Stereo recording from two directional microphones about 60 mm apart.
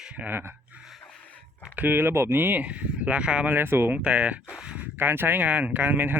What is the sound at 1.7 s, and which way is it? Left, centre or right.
Speech, right.